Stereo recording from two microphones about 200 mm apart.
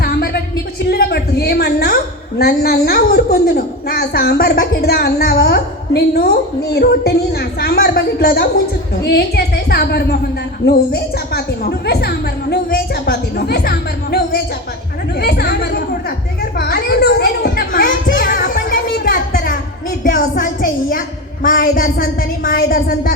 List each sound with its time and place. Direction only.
0.0 s music: 50° left (ahead or behind)
0.9 s a sound: 50° left (ahead or behind)
2.4 s a woman's voice: 50° left (ahead or behind)
18.1 s music: 45° left (ahead or behind)
20.1 s a woman's voice: 40° left (ahead or behind)